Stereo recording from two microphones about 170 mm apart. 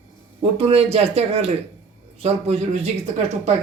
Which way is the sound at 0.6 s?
35° right (ahead or behind).